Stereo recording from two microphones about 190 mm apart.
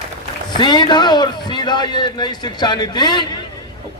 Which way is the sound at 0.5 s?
25° left (ahead or behind).